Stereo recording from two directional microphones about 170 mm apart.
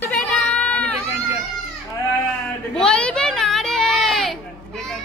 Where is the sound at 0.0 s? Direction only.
5° left (ahead or behind).